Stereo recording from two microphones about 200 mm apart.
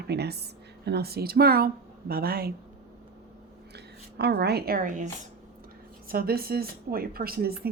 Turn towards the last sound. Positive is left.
turn(degrees=-50)  # may be behind; listen again after turning